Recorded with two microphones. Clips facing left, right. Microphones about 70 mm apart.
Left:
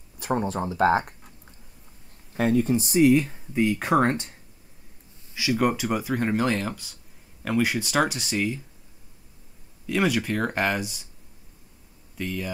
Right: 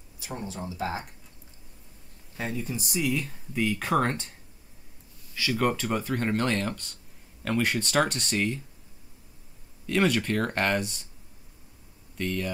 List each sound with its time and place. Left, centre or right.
0.2 s speech: left
2.3 s speech: left
5.3 s speech: centre
9.8 s speech: centre
12.2 s speech: centre